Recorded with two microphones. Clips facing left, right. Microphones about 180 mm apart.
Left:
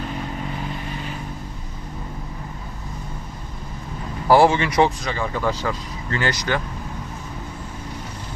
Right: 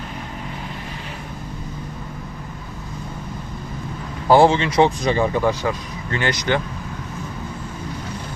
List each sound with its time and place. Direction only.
4.3 s speech: 20° right (ahead or behind)